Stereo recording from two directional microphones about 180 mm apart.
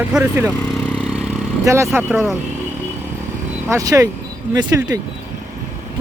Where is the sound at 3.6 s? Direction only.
15° right (ahead or behind).